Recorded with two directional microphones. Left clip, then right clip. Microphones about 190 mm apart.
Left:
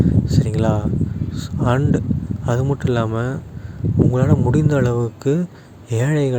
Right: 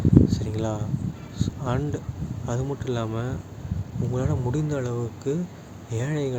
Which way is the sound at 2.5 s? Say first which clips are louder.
Left 9 dB; 40° left (ahead or behind).